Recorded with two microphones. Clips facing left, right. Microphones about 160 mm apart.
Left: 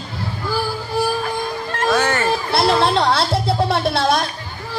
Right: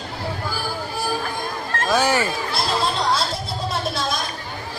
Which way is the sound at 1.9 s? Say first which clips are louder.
Right 1 dB; 10° right (ahead or behind).